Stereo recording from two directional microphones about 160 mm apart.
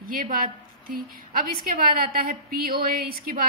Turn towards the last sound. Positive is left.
turn(degrees=-65)  # may be behind; listen again after turning